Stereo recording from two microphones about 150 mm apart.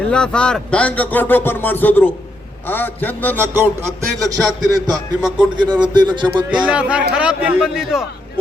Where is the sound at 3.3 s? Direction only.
15° right (ahead or behind).